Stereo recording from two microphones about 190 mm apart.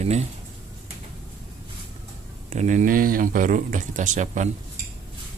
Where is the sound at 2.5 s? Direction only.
40° right (ahead or behind).